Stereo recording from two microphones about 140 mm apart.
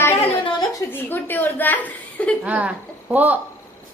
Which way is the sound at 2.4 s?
10° right (ahead or behind).